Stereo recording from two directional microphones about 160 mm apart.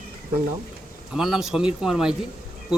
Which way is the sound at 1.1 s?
5° right (ahead or behind).